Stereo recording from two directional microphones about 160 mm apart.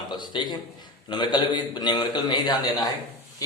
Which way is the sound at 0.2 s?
30° left (ahead or behind).